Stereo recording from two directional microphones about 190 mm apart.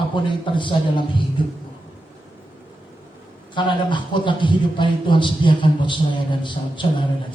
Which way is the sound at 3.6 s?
25° left (ahead or behind).